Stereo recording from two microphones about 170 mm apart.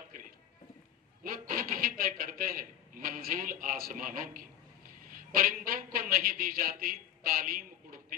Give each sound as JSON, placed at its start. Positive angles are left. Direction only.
{"t": 1.2, "sound": "a man's voice", "side_deg": -55}